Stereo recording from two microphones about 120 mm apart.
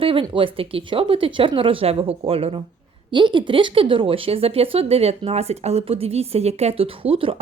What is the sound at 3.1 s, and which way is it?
Speech, 40° right (ahead or behind).